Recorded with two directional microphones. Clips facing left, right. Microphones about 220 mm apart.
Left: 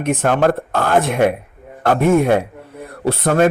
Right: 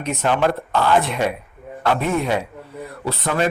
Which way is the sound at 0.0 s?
50° left (ahead or behind).